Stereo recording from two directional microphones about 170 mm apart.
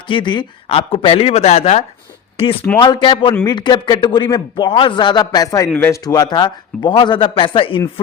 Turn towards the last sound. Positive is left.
turn(degrees=30)  # may be behind; listen again after turning